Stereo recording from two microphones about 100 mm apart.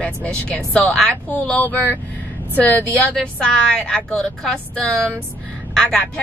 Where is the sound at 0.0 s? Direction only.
10° left (ahead or behind).